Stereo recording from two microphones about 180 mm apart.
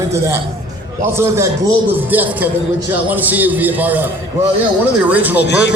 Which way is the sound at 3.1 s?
10° right (ahead or behind).